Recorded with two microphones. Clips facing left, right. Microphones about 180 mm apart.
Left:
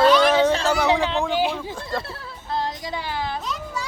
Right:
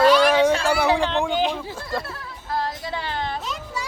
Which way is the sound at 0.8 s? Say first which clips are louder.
Even; 15° left (ahead or behind).